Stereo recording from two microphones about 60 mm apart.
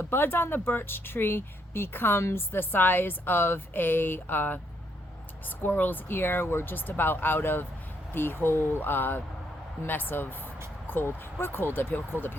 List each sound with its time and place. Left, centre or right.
0.0 s speech: left
5.6 s speech: left